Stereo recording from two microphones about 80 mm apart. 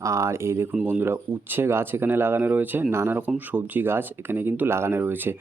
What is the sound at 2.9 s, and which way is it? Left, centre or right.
Speech, right.